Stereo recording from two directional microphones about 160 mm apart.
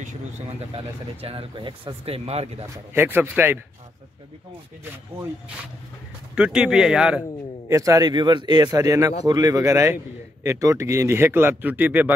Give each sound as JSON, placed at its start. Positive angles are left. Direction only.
{"t": 0.0, "sound": "a man's voice", "side_deg": -40}
{"t": 2.7, "sound": "speech", "side_deg": -15}
{"t": 6.3, "sound": "speech", "side_deg": -5}
{"t": 7.6, "sound": "a man's voice", "side_deg": -20}